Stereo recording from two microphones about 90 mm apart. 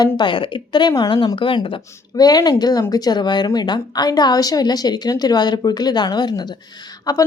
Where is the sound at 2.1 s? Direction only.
45° left (ahead or behind).